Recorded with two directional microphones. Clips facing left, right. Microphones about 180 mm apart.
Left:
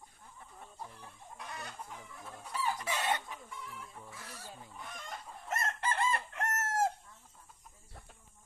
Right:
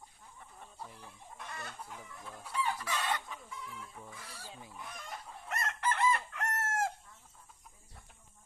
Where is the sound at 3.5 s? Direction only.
Centre (ahead or behind).